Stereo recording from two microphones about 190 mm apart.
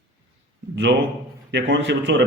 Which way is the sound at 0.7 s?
65° right (ahead or behind).